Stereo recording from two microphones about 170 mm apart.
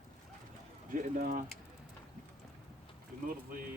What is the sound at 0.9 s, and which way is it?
Speech, 55° right (ahead or behind).